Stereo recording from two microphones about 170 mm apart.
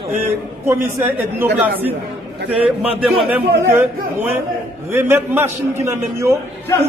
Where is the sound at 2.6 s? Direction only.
5° right (ahead or behind).